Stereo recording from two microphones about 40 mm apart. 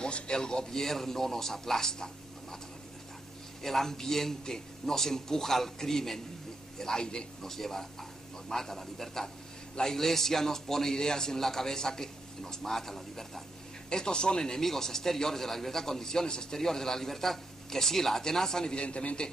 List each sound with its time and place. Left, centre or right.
0.0 s a man's voice: left
0.7 s a man's voice: centre
3.6 s a man's voice: centre
13.8 s a man's voice: centre
14.6 s a man's voice: centre; by 19.2 s left